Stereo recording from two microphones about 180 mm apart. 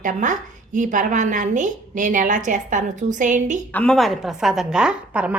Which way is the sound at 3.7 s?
5° left (ahead or behind).